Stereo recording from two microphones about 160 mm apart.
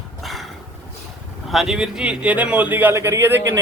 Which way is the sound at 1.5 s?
Centre (ahead or behind).